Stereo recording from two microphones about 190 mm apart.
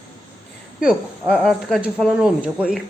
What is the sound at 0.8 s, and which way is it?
Speech, 5° right (ahead or behind).